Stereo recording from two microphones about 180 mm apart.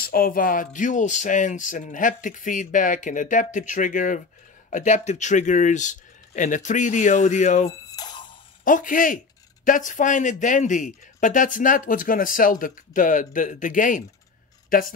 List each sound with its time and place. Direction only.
0.0 s speech: 55° left (ahead or behind)
7.9 s a sound: 25° left (ahead or behind)
8.6 s speech: 50° left (ahead or behind)